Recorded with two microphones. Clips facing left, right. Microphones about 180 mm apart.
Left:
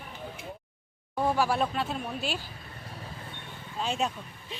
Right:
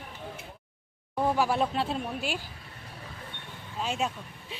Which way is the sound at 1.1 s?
5° right (ahead or behind).